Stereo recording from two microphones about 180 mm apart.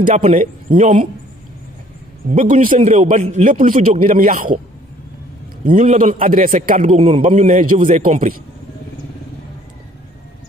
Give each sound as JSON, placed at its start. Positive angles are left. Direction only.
{"t": 0.0, "sound": "a man's voice", "side_deg": -35}
{"t": 0.4, "sound": "a man's voice", "side_deg": -50}
{"t": 2.2, "sound": "a man's voice", "side_deg": -50}
{"t": 5.7, "sound": "a man's voice", "side_deg": -45}